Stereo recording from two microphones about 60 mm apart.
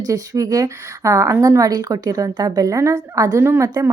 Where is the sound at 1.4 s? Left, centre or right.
Right.